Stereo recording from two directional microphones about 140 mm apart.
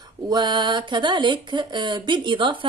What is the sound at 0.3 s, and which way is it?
Speech, 30° right (ahead or behind).